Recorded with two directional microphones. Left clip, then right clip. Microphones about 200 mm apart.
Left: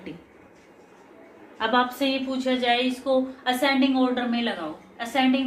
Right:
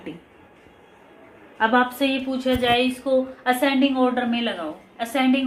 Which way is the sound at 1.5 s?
45° right (ahead or behind).